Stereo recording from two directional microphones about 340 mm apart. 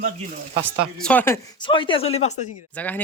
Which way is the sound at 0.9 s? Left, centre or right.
Centre.